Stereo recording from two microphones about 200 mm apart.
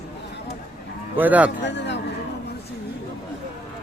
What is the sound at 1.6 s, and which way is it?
Speech, 60° left (ahead or behind).